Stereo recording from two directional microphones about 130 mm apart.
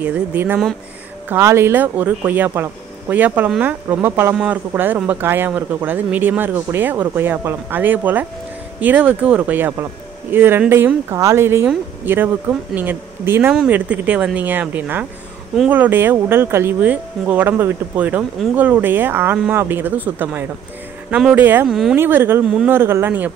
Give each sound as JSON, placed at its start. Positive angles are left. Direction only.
{"t": 0.0, "sound": "speech", "side_deg": -10}
{"t": 21.9, "sound": "speech", "side_deg": -15}